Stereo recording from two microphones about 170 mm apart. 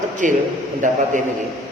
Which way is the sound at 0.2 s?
50° right (ahead or behind).